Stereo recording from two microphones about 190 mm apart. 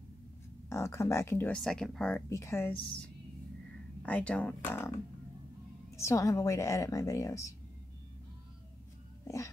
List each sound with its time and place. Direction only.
0.7 s speech: 15° left (ahead or behind)
4.0 s speech: 5° left (ahead or behind)